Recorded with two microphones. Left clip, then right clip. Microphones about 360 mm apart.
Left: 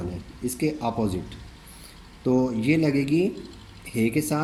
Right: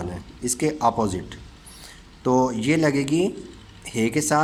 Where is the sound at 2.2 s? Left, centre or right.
Right.